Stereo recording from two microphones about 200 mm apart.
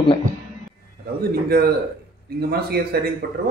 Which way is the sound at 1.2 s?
50° right (ahead or behind).